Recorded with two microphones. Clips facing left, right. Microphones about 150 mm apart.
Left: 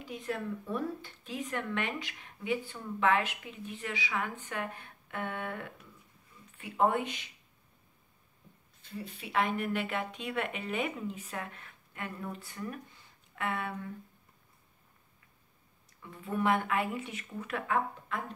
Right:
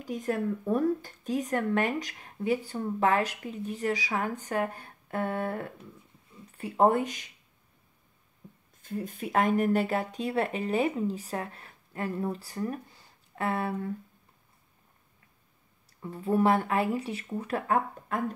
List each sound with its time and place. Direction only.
0.0 s speech: 45° right (ahead or behind)
8.8 s speech: 45° right (ahead or behind)
16.0 s speech: 35° right (ahead or behind)